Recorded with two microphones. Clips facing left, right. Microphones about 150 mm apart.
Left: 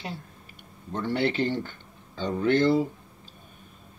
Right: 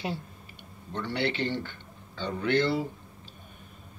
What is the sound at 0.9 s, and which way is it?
Speech, 45° left (ahead or behind).